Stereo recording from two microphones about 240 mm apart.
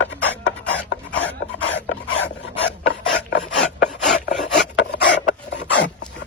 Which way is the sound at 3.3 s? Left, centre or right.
Left.